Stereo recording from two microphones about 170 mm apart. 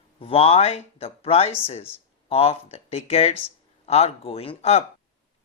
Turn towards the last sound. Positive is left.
turn(degrees=35)  # may be behind; listen again after turning